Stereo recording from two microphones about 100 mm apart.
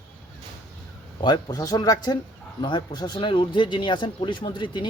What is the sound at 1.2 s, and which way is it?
Speech, 45° left (ahead or behind).